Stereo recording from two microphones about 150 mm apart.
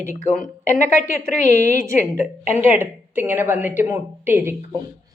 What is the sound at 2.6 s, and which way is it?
A woman's voice, 15° right (ahead or behind).